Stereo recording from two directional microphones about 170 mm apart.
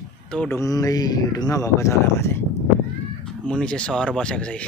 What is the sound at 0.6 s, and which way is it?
Speech, 20° left (ahead or behind).